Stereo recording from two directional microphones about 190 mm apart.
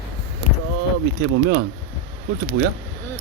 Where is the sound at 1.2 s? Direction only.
70° right (ahead or behind).